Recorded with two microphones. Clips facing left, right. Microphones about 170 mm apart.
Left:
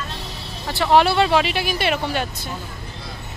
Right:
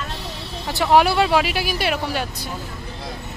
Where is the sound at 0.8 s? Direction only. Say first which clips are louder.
Even; 10° right (ahead or behind).